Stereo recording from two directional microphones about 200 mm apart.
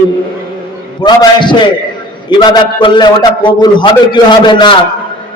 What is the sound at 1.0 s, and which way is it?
A man's voice, 20° left (ahead or behind).